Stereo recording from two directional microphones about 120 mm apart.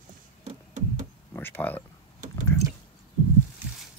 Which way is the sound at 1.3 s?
20° left (ahead or behind).